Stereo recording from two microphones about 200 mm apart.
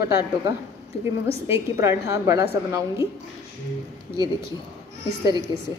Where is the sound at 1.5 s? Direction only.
15° right (ahead or behind).